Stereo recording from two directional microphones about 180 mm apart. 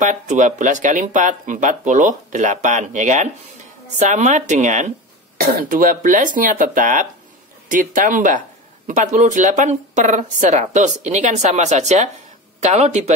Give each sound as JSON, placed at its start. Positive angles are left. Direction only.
{"t": 0.0, "sound": "speech", "side_deg": -45}